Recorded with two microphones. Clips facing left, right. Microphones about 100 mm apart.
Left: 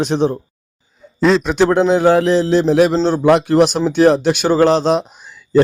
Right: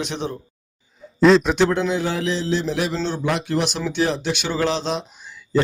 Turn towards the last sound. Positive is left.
turn(degrees=45)  # may be behind; listen again after turning